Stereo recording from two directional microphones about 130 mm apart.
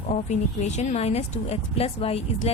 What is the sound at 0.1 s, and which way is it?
A woman's voice, 60° left (ahead or behind).